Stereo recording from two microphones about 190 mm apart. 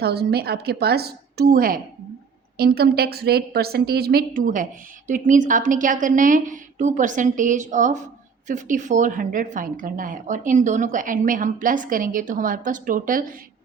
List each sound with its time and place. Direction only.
0.0 s a woman's voice: 60° right (ahead or behind)